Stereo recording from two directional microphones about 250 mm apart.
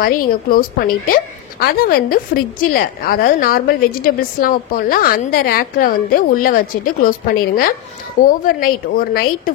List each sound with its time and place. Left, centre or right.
0.0 s a woman's voice: left